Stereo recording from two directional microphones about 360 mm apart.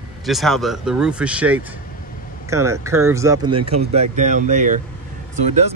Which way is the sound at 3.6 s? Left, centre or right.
Right.